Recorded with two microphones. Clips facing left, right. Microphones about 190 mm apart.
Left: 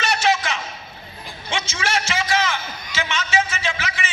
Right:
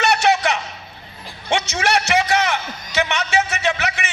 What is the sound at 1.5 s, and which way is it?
A man's voice, 65° right (ahead or behind).